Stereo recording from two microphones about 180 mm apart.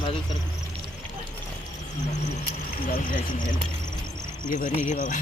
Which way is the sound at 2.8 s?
50° left (ahead or behind).